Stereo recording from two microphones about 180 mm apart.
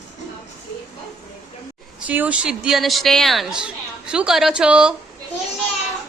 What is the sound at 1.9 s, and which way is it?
A woman's voice, 10° right (ahead or behind).